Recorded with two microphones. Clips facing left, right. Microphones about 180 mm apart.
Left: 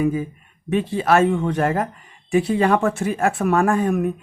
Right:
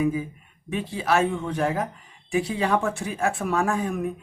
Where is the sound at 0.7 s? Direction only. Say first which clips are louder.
Left 6 dB; 60° left (ahead or behind).